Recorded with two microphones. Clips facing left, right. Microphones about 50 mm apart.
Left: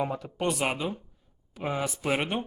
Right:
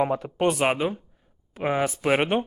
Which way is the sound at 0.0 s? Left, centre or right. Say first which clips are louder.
Right 6 dB; right.